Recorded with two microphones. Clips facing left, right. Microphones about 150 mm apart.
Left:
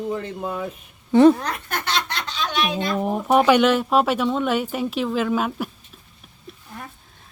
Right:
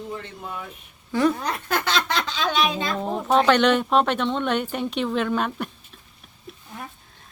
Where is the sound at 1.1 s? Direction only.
25° left (ahead or behind).